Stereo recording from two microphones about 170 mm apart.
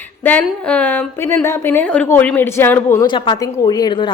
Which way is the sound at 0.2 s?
10° left (ahead or behind).